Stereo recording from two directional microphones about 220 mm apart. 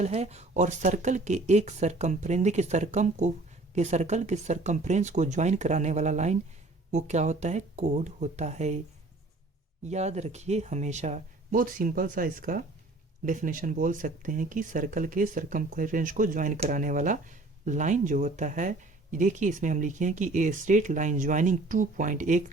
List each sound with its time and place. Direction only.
0.0 s speech: 30° right (ahead or behind)
9.8 s speech: 30° right (ahead or behind)